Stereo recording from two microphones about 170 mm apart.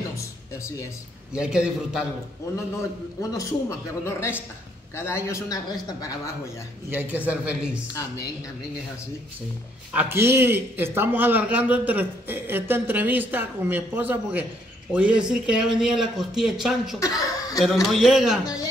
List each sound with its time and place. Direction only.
1.3 s speech: 5° right (ahead or behind)
3.2 s a man's voice: 20° left (ahead or behind)
6.9 s a man's voice: 10° right (ahead or behind)
9.9 s a man's voice: 15° right (ahead or behind)
17.0 s chuckle: 20° left (ahead or behind)
17.9 s speech: centre (ahead or behind)